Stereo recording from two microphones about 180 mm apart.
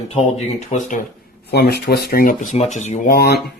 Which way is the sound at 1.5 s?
60° left (ahead or behind).